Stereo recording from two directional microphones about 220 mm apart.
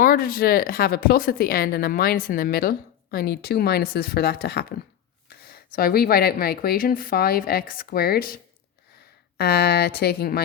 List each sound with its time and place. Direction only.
0.0 s a woman's voice: 40° left (ahead or behind)
9.4 s a woman's voice: 45° left (ahead or behind)